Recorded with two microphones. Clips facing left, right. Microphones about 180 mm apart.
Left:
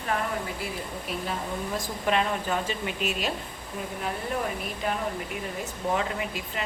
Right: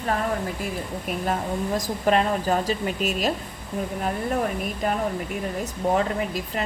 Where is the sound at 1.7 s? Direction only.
40° right (ahead or behind).